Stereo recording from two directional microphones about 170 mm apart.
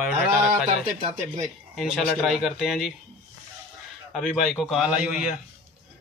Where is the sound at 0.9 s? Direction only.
40° right (ahead or behind).